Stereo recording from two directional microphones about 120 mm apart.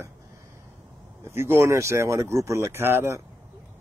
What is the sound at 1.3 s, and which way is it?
Speech, 20° right (ahead or behind).